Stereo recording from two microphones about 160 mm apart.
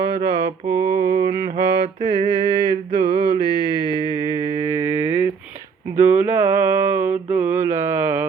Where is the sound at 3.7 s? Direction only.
30° left (ahead or behind).